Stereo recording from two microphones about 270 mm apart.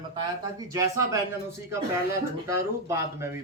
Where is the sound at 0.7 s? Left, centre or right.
Centre.